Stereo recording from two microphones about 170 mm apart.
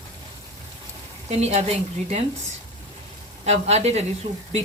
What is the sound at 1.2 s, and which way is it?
Speech, 40° right (ahead or behind).